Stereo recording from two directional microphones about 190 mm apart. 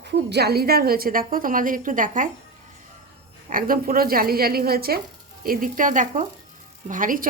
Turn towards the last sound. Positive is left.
turn(degrees=-45)  # may be behind; listen again after turning